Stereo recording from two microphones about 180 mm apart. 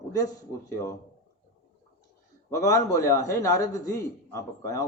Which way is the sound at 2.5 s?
20° left (ahead or behind).